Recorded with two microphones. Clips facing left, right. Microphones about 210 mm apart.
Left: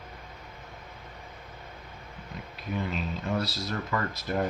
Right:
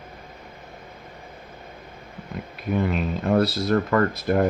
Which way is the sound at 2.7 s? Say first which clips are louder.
Right 8 dB; 60° right (ahead or behind).